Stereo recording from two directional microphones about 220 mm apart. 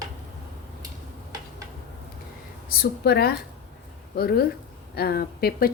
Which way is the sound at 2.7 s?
45° left (ahead or behind).